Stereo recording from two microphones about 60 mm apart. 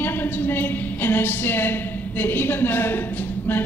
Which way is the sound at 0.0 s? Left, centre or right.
Left.